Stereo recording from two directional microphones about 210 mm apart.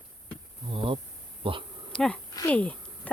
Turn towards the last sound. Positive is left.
turn(degrees=5)  # may be behind; listen again after turning